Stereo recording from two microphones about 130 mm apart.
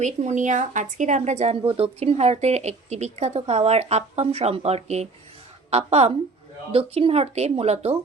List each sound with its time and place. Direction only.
0.0 s speech: 65° right (ahead or behind)